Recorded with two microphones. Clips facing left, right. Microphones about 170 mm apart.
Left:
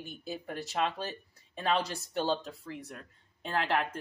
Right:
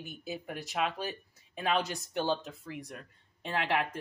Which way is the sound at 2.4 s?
Centre (ahead or behind).